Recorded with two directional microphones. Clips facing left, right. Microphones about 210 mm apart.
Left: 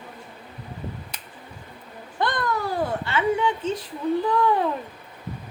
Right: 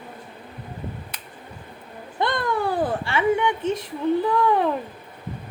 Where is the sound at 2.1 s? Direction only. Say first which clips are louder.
Right 2 dB; 25° right (ahead or behind).